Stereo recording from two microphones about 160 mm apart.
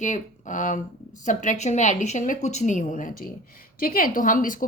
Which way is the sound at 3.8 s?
65° left (ahead or behind).